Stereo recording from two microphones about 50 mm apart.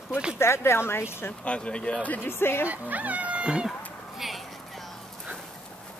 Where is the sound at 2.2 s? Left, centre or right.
Left.